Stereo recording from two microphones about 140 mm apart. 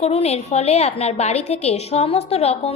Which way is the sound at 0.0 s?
45° left (ahead or behind).